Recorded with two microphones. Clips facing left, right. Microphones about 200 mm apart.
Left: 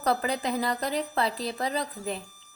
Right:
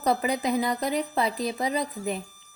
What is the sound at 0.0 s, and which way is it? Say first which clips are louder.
A woman's voice: right 2 dB; 10° right (ahead or behind).